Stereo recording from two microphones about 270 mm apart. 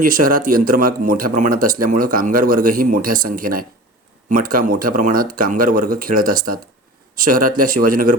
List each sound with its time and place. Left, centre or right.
0.0 s speech: right